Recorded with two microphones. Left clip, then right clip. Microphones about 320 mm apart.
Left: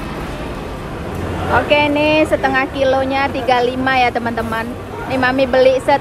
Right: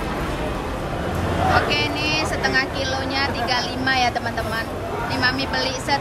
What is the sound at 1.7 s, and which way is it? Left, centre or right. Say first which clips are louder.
Speech: left 8 dB; centre.